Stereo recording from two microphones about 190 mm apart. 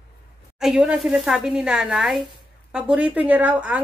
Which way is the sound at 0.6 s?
5° right (ahead or behind).